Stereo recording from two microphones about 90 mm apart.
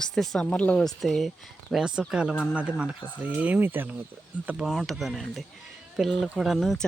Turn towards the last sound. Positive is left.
turn(degrees=0)  # may be behind; listen again after turning